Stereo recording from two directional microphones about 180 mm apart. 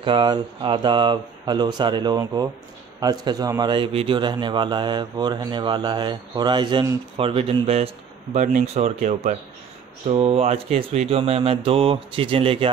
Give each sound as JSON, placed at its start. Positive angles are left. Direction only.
{"t": 0.0, "sound": "speech", "side_deg": -25}